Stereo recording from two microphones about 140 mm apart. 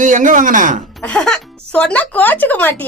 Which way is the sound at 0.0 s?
65° right (ahead or behind).